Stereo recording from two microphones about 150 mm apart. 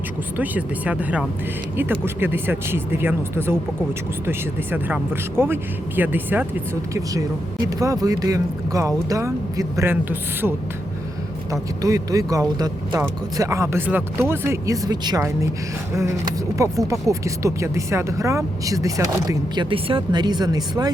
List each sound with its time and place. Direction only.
0.3 s speech: 10° right (ahead or behind)
11.5 s speech: 25° right (ahead or behind)
19.7 s speech: 35° right (ahead or behind)